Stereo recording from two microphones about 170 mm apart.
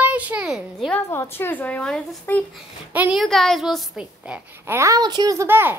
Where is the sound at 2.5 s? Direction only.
5° right (ahead or behind).